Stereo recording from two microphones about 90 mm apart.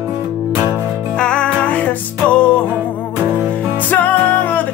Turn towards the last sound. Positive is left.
turn(degrees=20)  # may be behind; listen again after turning